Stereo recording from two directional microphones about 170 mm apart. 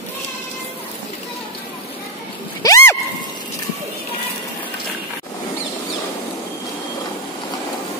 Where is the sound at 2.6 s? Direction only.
20° left (ahead or behind).